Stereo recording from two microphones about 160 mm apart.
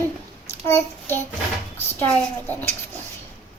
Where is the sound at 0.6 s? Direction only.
15° left (ahead or behind).